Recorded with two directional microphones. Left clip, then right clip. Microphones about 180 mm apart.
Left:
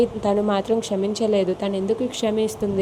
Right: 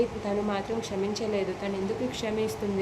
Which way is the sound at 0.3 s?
35° left (ahead or behind).